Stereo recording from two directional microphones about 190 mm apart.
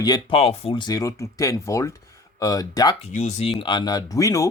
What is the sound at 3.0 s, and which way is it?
Speech, 40° left (ahead or behind).